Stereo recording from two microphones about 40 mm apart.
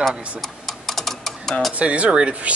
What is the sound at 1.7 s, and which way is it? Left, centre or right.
Speech, right.